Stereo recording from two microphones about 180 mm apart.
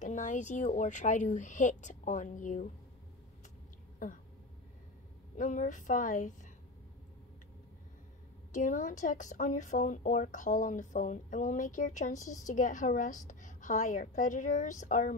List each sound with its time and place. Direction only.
0.0 s speech: 45° left (ahead or behind)
5.4 s speech: 45° left (ahead or behind)
8.5 s speech: 45° left (ahead or behind)